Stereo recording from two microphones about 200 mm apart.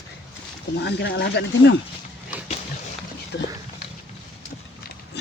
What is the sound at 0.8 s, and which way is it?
Speech, 60° left (ahead or behind).